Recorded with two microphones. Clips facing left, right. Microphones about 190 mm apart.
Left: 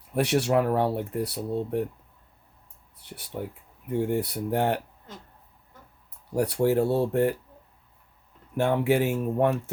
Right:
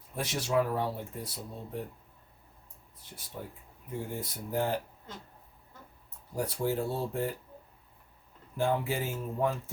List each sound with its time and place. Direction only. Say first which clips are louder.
0.1 s speech: left 8 dB; 70° left (ahead or behind)
3.0 s a sound: left 8 dB; 70° left (ahead or behind)
3.8 s speech: left 11 dB; 70° left (ahead or behind)
6.3 s speech: left 8 dB; 70° left (ahead or behind)
8.5 s speech: left 7 dB; 70° left (ahead or behind)